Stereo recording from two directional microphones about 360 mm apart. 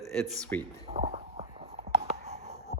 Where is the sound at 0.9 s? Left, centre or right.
Centre.